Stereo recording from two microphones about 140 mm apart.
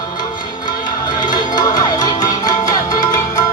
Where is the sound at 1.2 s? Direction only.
30° left (ahead or behind).